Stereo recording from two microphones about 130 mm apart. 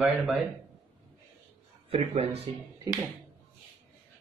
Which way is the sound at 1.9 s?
50° right (ahead or behind).